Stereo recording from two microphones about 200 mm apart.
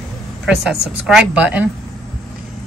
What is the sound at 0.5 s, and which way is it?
Speech, 5° right (ahead or behind).